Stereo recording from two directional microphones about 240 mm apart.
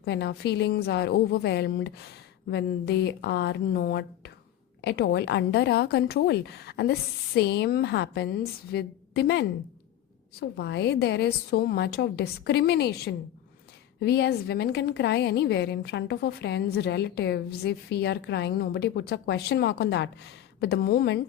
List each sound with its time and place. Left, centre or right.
0.0 s a woman's voice: left
10.6 s a woman's voice: left